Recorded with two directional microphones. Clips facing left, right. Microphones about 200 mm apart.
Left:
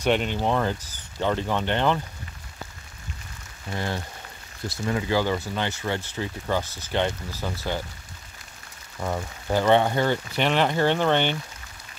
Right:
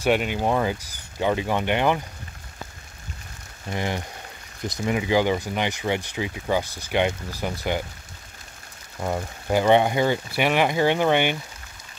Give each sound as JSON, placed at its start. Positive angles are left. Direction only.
{"t": 0.0, "sound": "speech", "side_deg": -5}
{"t": 3.7, "sound": "speech", "side_deg": -15}
{"t": 9.0, "sound": "speech", "side_deg": -15}